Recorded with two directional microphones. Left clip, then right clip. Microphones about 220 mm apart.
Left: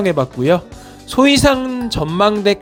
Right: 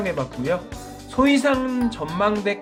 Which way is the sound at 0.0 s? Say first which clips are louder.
Left 9 dB; 40° left (ahead or behind).